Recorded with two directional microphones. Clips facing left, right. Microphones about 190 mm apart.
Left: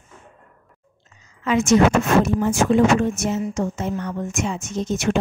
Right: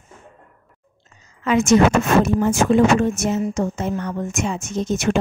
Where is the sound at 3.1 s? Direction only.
45° right (ahead or behind).